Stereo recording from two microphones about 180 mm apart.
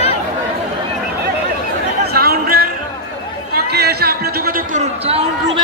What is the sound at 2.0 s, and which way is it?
Chatter, 60° right (ahead or behind).